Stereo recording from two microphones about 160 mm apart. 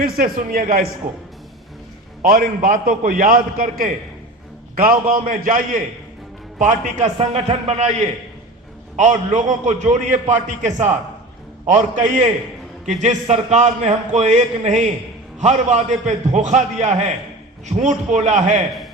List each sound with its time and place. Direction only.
0.0 s a man's voice: 60° right (ahead or behind)
2.2 s a man's voice: 65° right (ahead or behind); by 7.9 s 40° right (ahead or behind)
9.0 s a man's voice: 50° right (ahead or behind)